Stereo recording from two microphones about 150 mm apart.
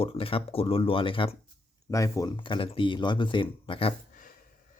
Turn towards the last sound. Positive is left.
turn(degrees=35)  # may be behind; listen again after turning